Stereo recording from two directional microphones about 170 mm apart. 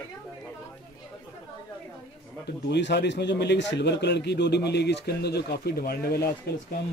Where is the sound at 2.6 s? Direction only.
85° left; by 6.5 s 65° left (ahead or behind).